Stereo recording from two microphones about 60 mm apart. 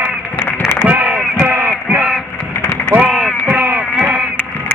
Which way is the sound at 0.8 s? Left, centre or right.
Right.